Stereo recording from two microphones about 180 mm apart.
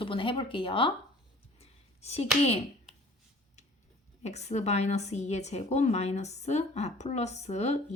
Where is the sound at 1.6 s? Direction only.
35° left (ahead or behind).